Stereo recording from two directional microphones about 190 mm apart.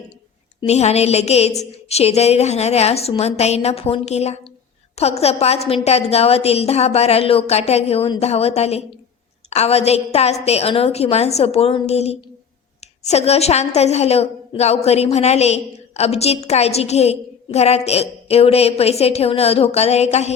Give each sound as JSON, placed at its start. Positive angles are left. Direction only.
{"t": 0.7, "sound": "a woman's voice", "side_deg": 35}